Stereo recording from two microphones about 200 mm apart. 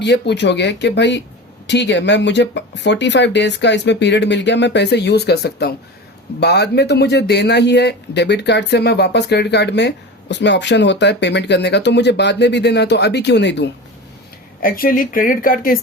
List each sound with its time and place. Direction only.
0.0 s speech: 60° left (ahead or behind)
14.6 s speech: 45° left (ahead or behind)